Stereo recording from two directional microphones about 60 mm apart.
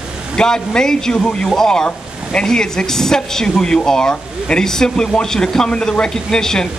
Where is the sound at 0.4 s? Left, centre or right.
Centre.